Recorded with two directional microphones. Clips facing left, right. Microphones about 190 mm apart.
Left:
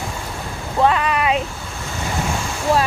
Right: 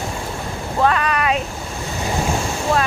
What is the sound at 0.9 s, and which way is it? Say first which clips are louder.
Speech: left 1 dB; 20° left (ahead or behind).